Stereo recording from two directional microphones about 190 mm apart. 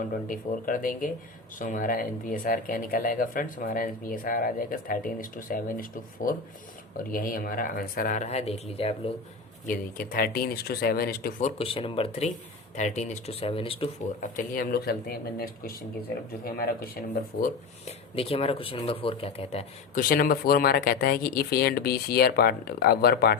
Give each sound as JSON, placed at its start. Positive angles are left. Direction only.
{"t": 0.1, "sound": "speech", "side_deg": 45}
{"t": 9.6, "sound": "speech", "side_deg": 50}
{"t": 11.5, "sound": "speech", "side_deg": 30}
{"t": 14.2, "sound": "speech", "side_deg": 45}
{"t": 17.8, "sound": "speech", "side_deg": 30}
{"t": 20.0, "sound": "speech", "side_deg": 50}